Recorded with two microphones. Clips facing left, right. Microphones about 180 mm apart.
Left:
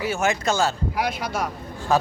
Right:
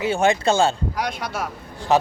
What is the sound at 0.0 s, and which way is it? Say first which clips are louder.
Speech: right 4 dB; 30° right (ahead or behind).